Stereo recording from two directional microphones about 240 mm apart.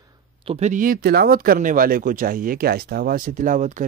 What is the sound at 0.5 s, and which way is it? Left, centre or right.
Speech, right.